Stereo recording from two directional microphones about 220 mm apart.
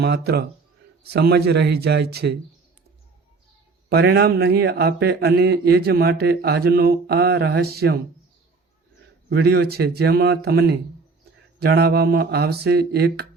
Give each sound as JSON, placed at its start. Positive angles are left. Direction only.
{"t": 0.0, "sound": "a man's voice", "side_deg": -45}
{"t": 3.8, "sound": "a man's voice", "side_deg": -50}
{"t": 9.3, "sound": "a man's voice", "side_deg": -45}